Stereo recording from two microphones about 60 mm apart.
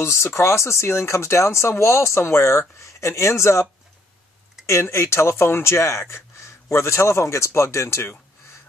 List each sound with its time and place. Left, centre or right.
0.0 s speech: left
4.6 s speech: left